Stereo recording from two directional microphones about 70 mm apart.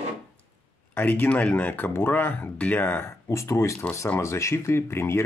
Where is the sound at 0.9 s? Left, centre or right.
Left.